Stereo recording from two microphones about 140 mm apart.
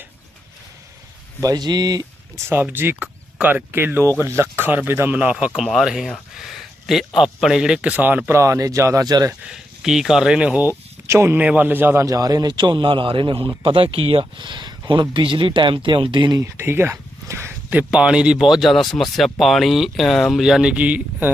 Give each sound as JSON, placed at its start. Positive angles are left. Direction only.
{"t": 1.4, "sound": "speech", "side_deg": -25}
{"t": 9.5, "sound": "speech", "side_deg": -5}
{"t": 16.4, "sound": "speech", "side_deg": -15}